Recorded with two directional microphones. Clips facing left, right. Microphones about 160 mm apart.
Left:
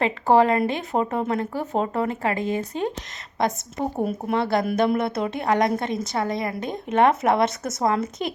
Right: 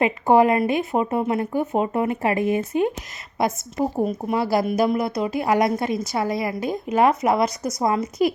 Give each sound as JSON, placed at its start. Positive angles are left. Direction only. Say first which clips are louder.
{"t": 0.0, "sound": "a woman's voice", "louder": "right 2 dB", "side_deg": -15}